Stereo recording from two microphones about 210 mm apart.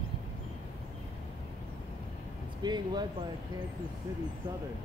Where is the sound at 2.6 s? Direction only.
20° right (ahead or behind).